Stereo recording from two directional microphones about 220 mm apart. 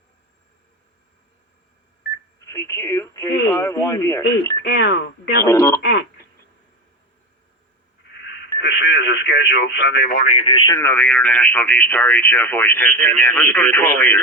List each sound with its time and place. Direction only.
2.4 s speech: 10° left (ahead or behind)
4.6 s speech: 50° left (ahead or behind)
5.4 s speech: 10° left (ahead or behind)
5.8 s speech: 55° left (ahead or behind)
8.5 s speech: 50° left (ahead or behind); by 10.8 s 25° left (ahead or behind)
10.8 s speech: 10° left (ahead or behind)